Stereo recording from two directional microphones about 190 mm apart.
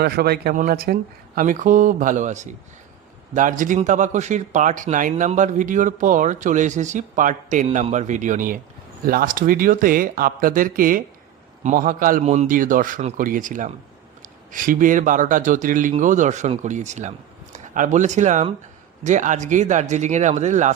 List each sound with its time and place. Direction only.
0.0 s a man's voice: 55° right (ahead or behind); by 20.7 s 40° right (ahead or behind)